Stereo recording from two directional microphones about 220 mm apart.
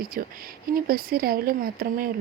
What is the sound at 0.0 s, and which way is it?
Speech, 40° right (ahead or behind).